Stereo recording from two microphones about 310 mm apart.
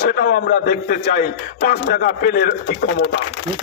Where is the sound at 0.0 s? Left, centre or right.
Left.